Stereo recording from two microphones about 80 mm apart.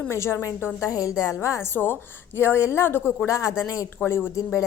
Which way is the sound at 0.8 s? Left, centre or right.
Left.